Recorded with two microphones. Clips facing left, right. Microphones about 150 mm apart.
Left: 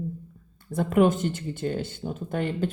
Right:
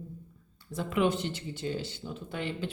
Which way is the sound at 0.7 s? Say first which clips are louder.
Left 7 dB; 50° left (ahead or behind).